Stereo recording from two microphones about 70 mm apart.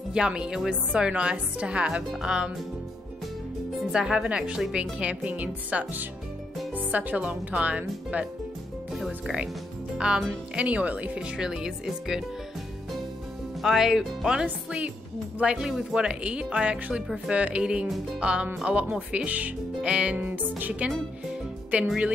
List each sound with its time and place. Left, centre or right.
0.1 s a woman's voice: centre
3.9 s a woman's voice: centre
8.9 s a woman's voice: centre
13.6 s speech: centre
14.4 s a woman's voice: centre
20.2 s music: right
21.7 s speech: centre